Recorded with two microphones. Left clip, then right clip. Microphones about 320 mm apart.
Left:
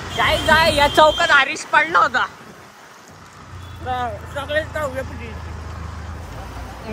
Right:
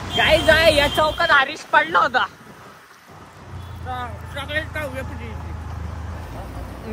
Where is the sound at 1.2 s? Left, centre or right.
Centre.